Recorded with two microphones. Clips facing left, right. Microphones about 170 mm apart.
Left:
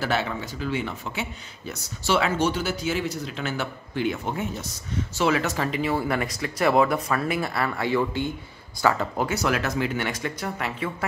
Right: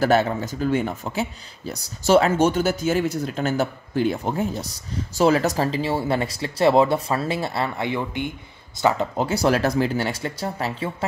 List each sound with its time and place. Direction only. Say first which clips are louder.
0.0 s speech: right 7 dB; 45° right (ahead or behind); by 9.3 s 20° right (ahead or behind)
9.3 s speech: right 5 dB; 35° right (ahead or behind)